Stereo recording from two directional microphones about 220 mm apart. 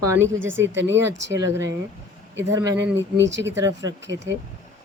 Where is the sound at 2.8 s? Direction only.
55° right (ahead or behind).